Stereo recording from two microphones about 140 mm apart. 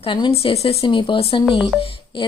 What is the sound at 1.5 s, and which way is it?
Music, centre (ahead or behind).